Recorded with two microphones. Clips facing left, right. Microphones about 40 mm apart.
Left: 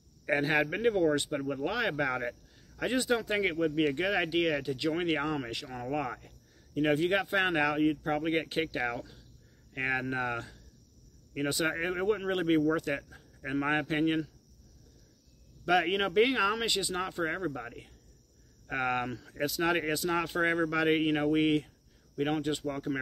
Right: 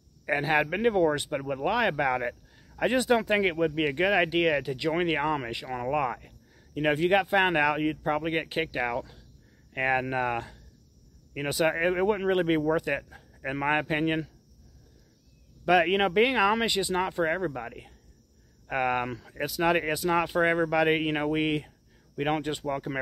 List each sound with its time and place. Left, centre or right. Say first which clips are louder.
0.2 s speech: right 2 dB; centre
15.7 s speech: right 4 dB; centre
22.2 s speech: right 2 dB; right
22.7 s speech: right 2 dB; centre